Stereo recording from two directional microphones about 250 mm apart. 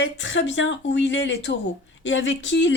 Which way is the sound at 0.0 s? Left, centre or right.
Left.